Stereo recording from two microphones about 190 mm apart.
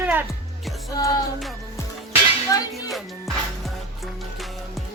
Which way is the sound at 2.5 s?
20° left (ahead or behind).